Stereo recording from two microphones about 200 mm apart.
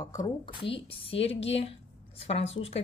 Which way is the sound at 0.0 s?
15° left (ahead or behind).